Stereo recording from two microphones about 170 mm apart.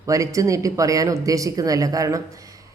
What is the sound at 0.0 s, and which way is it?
A woman's voice, 20° right (ahead or behind).